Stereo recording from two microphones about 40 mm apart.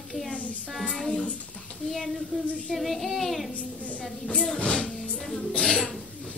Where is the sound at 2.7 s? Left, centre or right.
Centre.